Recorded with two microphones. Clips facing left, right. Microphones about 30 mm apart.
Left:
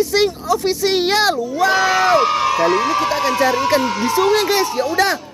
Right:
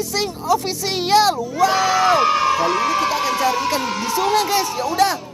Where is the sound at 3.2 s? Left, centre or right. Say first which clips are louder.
Left 3 dB; left.